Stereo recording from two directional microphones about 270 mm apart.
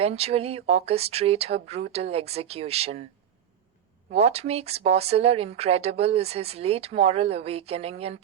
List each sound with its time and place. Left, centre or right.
0.0 s speech: right
4.1 s speech: right